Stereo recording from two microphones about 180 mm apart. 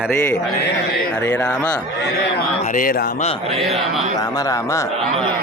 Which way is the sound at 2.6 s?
50° left (ahead or behind).